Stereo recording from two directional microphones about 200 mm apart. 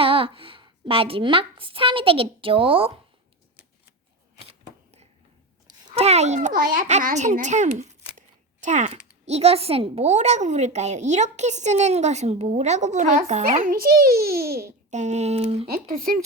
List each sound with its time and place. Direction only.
0.0 s a woman's voice: 25° right (ahead or behind)
4.4 s a sound: 30° right (ahead or behind)
5.9 s speech: 30° right (ahead or behind)
6.5 s a child's voice: 45° right (ahead or behind)
14.8 s speech: 35° right (ahead or behind)
15.6 s a child's voice: 50° right (ahead or behind)